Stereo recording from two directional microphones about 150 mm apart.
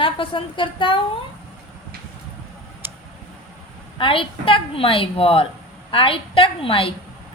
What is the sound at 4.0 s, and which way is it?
A woman's voice, 35° left (ahead or behind).